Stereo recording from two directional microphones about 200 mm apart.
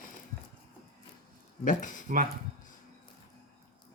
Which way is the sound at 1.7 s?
40° left (ahead or behind).